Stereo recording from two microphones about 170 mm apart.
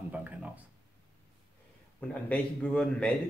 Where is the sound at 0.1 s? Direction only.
10° right (ahead or behind).